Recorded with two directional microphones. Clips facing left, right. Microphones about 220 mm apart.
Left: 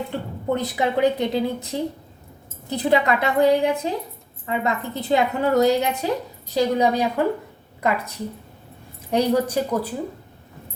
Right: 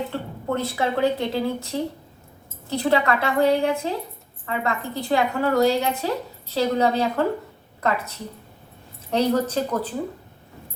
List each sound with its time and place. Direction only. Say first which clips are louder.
0.1 s a woman's voice: left 2 dB; 15° left (ahead or behind)